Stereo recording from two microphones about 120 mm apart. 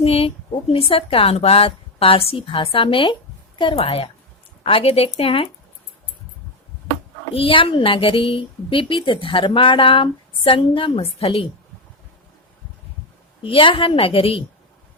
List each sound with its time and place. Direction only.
0.0 s a woman's voice: 55° left (ahead or behind)
7.3 s a woman's voice: 50° left (ahead or behind)
13.4 s a woman's voice: 45° left (ahead or behind)